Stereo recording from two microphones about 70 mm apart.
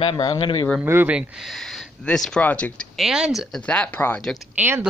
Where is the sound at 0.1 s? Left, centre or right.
Left.